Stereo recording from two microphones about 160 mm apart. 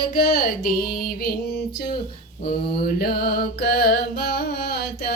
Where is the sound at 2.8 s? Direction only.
75° left (ahead or behind).